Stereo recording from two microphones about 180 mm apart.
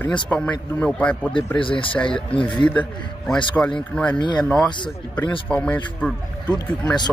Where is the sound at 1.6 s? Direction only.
30° left (ahead or behind).